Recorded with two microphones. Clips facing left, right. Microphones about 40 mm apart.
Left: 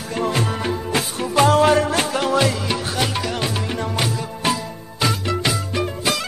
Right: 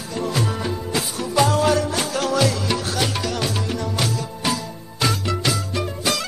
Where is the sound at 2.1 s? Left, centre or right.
Left.